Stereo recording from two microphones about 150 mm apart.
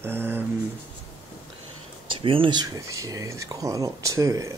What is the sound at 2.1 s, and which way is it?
Speech, 35° right (ahead or behind).